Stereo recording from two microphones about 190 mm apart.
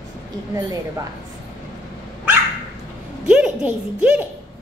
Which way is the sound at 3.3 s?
5° right (ahead or behind).